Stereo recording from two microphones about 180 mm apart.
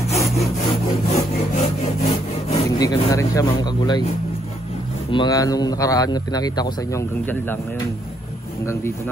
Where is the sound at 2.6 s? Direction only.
20° left (ahead or behind).